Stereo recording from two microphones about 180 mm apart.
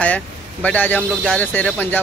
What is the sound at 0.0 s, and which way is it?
Speech, 5° left (ahead or behind).